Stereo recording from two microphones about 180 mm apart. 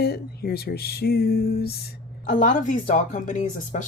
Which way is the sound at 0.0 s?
60° left (ahead or behind).